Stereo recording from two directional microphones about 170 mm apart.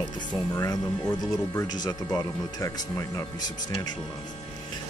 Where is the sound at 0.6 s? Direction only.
15° left (ahead or behind).